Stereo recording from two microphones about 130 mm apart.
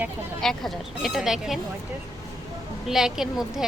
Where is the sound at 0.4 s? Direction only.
Centre (ahead or behind).